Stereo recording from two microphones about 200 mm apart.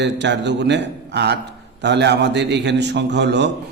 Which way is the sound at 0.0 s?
60° right (ahead or behind).